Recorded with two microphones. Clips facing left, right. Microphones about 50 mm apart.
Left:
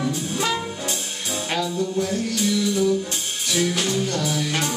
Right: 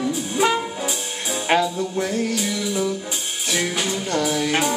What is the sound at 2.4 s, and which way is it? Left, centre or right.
Music, centre.